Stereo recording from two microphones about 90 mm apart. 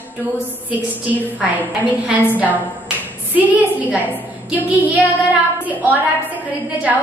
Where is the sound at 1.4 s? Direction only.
15° right (ahead or behind).